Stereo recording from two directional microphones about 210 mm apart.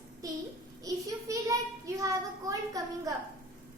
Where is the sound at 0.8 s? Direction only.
15° right (ahead or behind).